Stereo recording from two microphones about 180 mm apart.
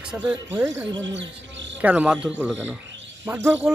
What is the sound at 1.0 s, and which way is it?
Insect, 85° right.